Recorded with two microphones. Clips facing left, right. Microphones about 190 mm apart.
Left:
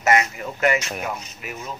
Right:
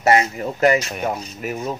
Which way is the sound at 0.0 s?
30° right (ahead or behind).